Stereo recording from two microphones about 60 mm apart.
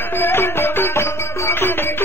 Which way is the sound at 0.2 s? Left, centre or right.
Left.